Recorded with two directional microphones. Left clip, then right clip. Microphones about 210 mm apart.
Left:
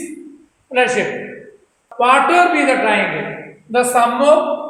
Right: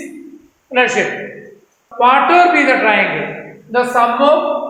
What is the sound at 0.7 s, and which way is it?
A man's voice, 20° left (ahead or behind).